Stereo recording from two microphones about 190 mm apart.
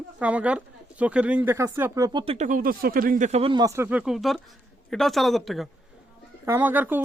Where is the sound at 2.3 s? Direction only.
40° right (ahead or behind); by 5.7 s centre (ahead or behind).